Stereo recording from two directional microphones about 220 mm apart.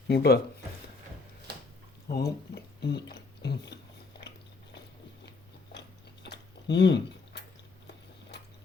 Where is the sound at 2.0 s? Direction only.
45° left (ahead or behind).